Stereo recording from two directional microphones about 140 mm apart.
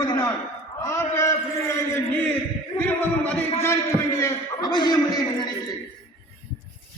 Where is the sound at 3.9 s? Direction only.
20° left (ahead or behind).